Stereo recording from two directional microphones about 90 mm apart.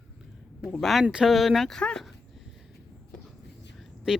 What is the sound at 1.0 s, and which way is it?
Speech, 5° right (ahead or behind).